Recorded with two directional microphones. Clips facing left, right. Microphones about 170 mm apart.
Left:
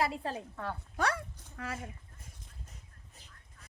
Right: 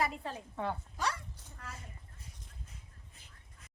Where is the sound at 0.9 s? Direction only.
60° left (ahead or behind); by 1.9 s 90° left.